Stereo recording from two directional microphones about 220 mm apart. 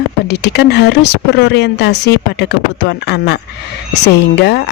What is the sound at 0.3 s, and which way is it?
Speech, 50° left (ahead or behind).